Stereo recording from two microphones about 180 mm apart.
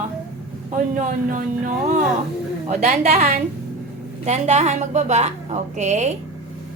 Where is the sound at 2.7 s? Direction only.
40° right (ahead or behind).